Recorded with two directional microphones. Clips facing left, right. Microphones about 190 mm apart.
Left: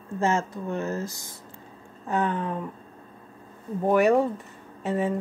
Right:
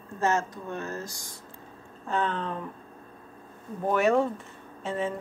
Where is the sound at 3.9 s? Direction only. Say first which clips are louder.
Left 4 dB; 15° left (ahead or behind).